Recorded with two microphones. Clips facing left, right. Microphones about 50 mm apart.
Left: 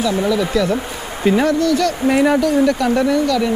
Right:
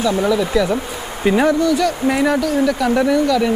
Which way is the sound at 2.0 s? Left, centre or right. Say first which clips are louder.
Left 4 dB; centre.